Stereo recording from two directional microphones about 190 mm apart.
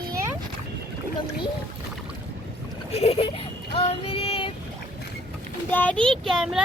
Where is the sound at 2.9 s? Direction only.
30° left (ahead or behind).